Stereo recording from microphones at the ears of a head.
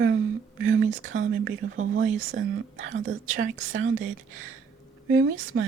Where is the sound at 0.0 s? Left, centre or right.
Right.